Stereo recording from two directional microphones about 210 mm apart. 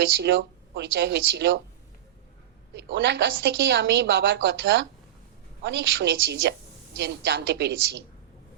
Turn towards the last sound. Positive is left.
turn(degrees=-55)  # may be behind; listen again after turning